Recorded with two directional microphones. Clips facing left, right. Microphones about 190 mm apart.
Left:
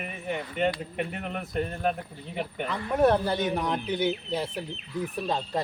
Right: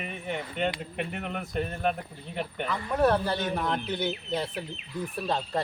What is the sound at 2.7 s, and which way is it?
A man's voice, 20° left (ahead or behind).